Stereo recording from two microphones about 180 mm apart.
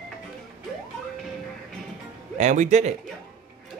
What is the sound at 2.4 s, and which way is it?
Speech, 40° right (ahead or behind).